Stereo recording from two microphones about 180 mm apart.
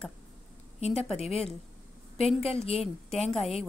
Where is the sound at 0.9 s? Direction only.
5° left (ahead or behind).